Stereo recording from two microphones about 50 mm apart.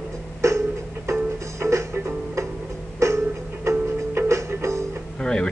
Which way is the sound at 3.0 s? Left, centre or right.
Right.